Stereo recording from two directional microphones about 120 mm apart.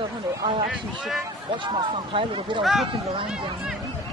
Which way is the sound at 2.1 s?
45° right (ahead or behind).